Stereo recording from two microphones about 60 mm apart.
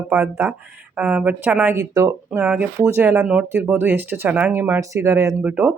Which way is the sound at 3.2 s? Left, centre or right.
Centre.